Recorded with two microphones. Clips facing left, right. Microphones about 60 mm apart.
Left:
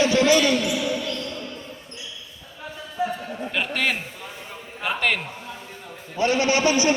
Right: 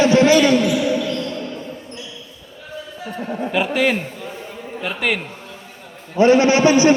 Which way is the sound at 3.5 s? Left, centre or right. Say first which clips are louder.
Right 6 dB; centre.